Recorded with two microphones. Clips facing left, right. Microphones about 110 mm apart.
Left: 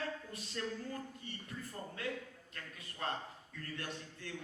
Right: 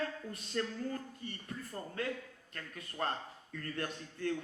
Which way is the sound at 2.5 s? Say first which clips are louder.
Right 7 dB; 45° right (ahead or behind).